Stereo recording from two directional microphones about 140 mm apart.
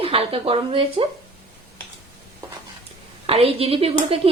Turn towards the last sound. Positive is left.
turn(degrees=-45)  # may be behind; listen again after turning